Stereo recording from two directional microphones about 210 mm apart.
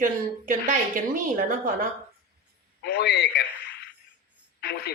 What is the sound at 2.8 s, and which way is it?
Speech, 50° left (ahead or behind).